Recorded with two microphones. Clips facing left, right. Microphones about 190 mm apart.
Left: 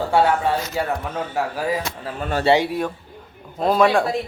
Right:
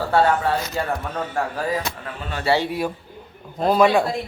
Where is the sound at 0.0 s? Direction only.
15° left (ahead or behind).